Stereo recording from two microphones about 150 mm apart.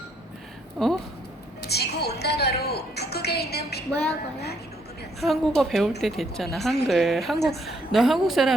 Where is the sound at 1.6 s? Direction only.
90° left.